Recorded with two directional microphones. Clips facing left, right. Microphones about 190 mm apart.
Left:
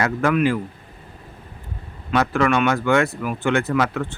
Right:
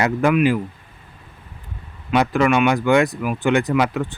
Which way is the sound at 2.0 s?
15° right (ahead or behind).